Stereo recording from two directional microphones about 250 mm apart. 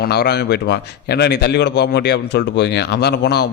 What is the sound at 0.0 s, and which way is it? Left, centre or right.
A man's voice, left.